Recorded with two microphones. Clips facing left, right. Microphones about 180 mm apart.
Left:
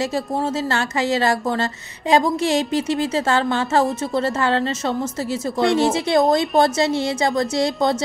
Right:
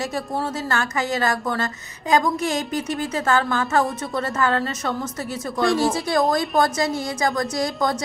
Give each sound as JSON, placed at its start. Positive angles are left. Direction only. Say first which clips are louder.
{"t": 0.0, "sound": "a woman's voice", "louder": "left 4 dB", "side_deg": 25}